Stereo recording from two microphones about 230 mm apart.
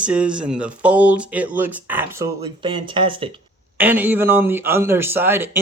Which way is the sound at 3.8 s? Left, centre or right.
Centre.